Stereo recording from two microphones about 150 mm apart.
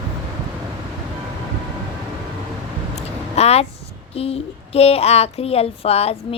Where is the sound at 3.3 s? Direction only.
45° left (ahead or behind).